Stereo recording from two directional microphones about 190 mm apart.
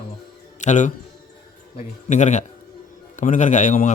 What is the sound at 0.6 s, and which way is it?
Speech, 40° left (ahead or behind).